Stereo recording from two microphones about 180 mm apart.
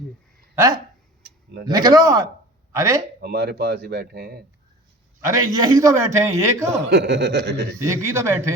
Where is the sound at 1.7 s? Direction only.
20° right (ahead or behind).